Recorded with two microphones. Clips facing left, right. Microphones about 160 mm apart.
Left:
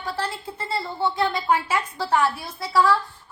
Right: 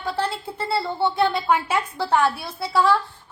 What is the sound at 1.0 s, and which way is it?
A woman's voice, 25° right (ahead or behind).